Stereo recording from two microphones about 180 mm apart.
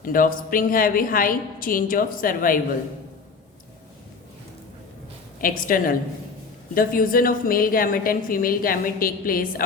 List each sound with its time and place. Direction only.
0.0 s a woman's voice: 50° left (ahead or behind)
5.4 s a woman's voice: 50° left (ahead or behind)